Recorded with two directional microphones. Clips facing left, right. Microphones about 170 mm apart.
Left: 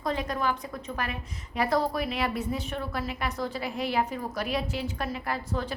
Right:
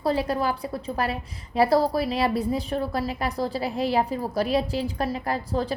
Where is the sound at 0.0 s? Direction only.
35° right (ahead or behind).